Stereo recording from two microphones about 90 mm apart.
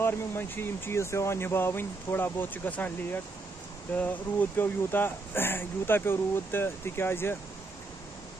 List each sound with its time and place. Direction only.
0.0 s speech: 25° left (ahead or behind)